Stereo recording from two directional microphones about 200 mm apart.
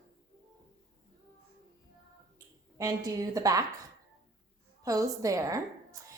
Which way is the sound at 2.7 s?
15° right (ahead or behind).